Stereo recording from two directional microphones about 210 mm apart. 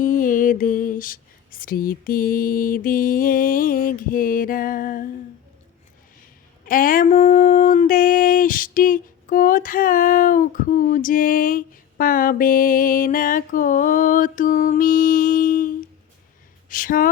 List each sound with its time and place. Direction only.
0.0 s lullaby: 40° left (ahead or behind)
6.7 s speech: 40° left (ahead or behind)